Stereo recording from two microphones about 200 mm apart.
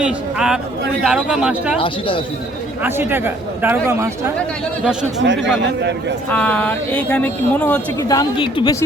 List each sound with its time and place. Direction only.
0.0 s speech: 5° right (ahead or behind)
1.8 s speech: 25° left (ahead or behind)
2.8 s speech: 10° right (ahead or behind)
5.2 s a man's voice: 65° right (ahead or behind)
6.3 s speech: 5° left (ahead or behind)
8.0 s speech: 20° left (ahead or behind)